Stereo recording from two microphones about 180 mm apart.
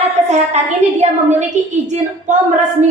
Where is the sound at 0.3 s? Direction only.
40° right (ahead or behind).